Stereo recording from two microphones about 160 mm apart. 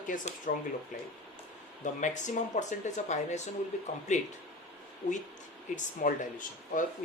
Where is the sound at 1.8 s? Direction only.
50° left (ahead or behind).